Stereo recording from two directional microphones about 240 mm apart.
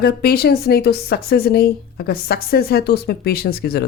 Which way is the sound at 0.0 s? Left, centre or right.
Left.